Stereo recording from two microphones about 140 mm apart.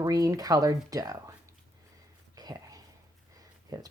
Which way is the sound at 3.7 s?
30° right (ahead or behind).